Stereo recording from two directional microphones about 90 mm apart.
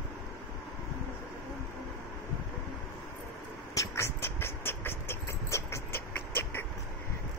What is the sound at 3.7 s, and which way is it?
Vehicle, 35° left (ahead or behind).